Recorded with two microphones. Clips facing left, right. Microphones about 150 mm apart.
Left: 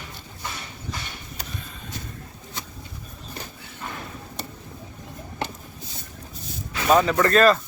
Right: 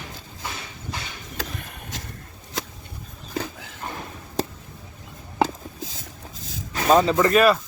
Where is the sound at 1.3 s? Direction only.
90° right.